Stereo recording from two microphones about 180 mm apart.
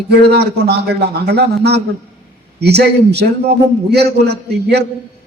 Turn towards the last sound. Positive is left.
turn(degrees=-65)  # may be behind; listen again after turning